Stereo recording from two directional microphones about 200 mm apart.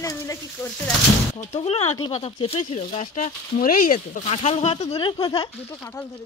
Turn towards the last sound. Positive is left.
turn(degrees=20)  # may be behind; listen again after turning